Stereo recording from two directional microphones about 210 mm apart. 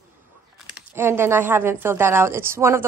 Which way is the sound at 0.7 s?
10° right (ahead or behind).